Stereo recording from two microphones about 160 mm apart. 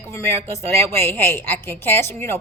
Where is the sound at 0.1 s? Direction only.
15° left (ahead or behind).